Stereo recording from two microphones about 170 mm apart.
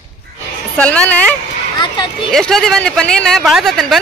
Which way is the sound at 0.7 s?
5° left (ahead or behind).